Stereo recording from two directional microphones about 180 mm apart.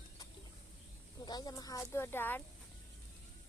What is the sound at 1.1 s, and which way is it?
Snake, 20° left (ahead or behind).